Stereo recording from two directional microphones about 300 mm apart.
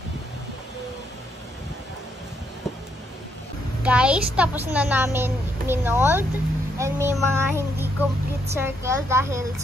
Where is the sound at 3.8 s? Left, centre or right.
Centre.